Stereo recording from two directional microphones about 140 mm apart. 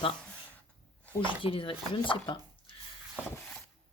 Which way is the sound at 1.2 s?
40° left (ahead or behind).